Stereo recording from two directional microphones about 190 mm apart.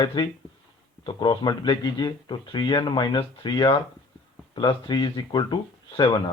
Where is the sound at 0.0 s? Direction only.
25° left (ahead or behind).